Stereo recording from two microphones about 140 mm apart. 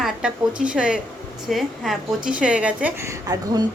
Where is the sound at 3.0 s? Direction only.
25° right (ahead or behind).